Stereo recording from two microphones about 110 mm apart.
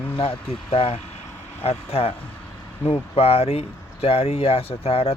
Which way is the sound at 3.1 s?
65° left (ahead or behind).